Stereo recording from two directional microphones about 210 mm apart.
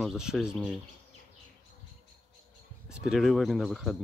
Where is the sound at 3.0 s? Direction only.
Centre (ahead or behind).